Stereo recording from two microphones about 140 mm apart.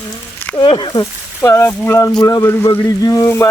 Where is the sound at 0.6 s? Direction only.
35° left (ahead or behind).